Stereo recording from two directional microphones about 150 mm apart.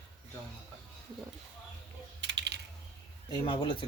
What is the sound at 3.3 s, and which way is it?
Speech, 30° left (ahead or behind).